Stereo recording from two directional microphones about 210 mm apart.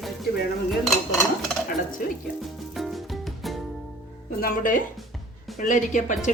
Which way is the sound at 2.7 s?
Centre (ahead or behind).